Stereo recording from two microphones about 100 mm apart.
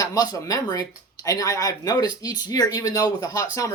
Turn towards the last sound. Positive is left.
turn(degrees=35)  # may be behind; listen again after turning